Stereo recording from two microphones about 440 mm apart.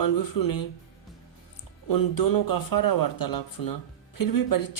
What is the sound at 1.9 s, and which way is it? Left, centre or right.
Speech, left.